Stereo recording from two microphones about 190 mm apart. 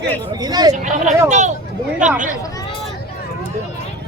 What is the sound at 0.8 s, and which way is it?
Speech, 40° right (ahead or behind).